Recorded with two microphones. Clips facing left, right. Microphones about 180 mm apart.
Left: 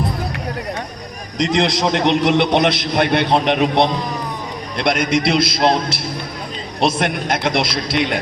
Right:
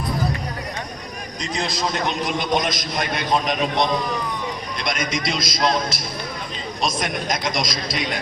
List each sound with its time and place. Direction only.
1.4 s a man's voice: 80° left; by 8.2 s 65° left (ahead or behind)